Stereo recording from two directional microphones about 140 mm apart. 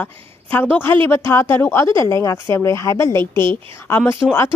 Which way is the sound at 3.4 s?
35° right (ahead or behind).